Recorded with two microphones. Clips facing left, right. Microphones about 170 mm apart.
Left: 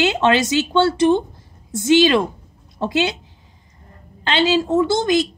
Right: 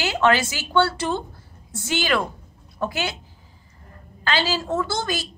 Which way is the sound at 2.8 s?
25° left (ahead or behind).